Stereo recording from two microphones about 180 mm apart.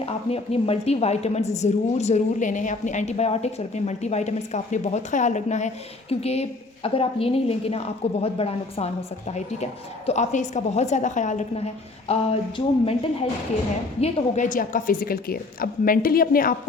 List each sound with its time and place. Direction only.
0.0 s a woman's voice: 35° left (ahead or behind)
14.0 s a woman's voice: 45° left (ahead or behind)